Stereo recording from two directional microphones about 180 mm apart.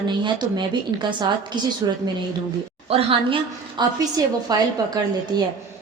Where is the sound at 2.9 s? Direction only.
30° right (ahead or behind).